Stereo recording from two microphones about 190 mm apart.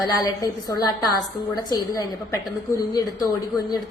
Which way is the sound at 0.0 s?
20° left (ahead or behind).